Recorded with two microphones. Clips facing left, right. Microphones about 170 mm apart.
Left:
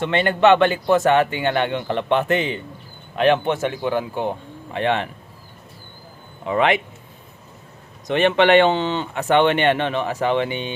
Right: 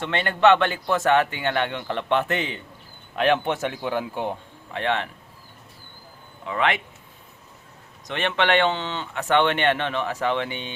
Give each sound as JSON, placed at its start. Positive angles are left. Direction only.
{"t": 0.0, "sound": "speech", "side_deg": 5}
{"t": 4.7, "sound": "speech", "side_deg": 10}
{"t": 6.4, "sound": "speech", "side_deg": 20}
{"t": 8.0, "sound": "speech", "side_deg": 10}